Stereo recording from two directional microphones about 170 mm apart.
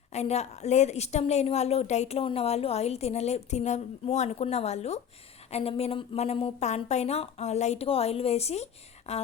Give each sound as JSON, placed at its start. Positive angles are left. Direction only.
{"t": 0.1, "sound": "a woman's voice", "side_deg": 40}